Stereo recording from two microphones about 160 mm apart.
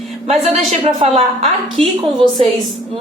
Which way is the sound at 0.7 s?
35° right (ahead or behind).